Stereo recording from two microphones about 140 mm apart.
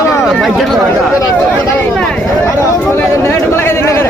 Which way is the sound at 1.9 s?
5° left (ahead or behind).